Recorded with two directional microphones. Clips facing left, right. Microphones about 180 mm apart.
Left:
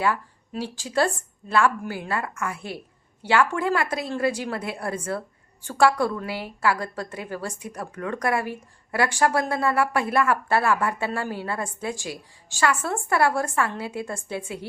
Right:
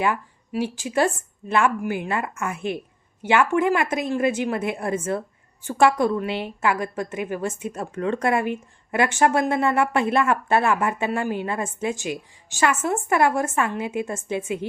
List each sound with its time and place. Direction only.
0.0 s a woman's voice: 15° right (ahead or behind)